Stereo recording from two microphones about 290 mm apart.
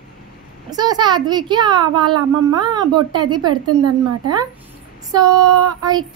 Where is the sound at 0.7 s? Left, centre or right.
Centre.